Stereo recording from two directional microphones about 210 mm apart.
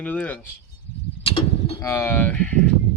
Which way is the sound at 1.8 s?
15° left (ahead or behind).